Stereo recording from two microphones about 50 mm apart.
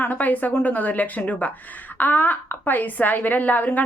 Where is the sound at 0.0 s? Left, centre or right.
Left.